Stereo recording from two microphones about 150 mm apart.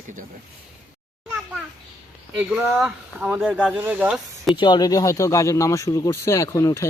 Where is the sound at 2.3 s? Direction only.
10° right (ahead or behind).